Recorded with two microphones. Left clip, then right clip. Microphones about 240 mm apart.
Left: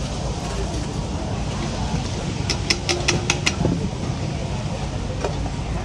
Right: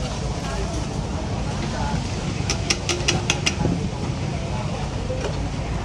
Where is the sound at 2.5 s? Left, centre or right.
Right.